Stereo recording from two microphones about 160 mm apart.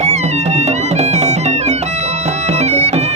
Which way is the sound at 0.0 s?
45° right (ahead or behind).